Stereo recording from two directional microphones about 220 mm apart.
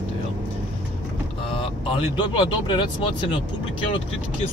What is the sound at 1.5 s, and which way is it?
Speech, 25° left (ahead or behind).